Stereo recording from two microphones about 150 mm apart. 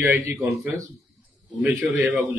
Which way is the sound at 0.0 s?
20° right (ahead or behind).